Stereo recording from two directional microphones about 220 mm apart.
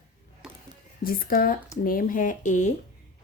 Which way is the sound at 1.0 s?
40° left (ahead or behind).